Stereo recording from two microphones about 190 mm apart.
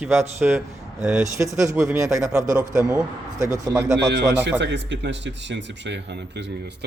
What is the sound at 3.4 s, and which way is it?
Speech, 20° right (ahead or behind).